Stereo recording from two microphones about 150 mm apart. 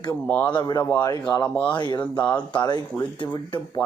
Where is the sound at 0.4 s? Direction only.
30° left (ahead or behind).